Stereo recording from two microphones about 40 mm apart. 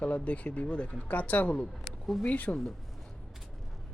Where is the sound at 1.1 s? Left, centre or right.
Left.